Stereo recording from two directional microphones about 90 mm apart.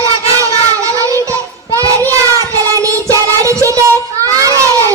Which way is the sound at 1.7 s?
40° right (ahead or behind).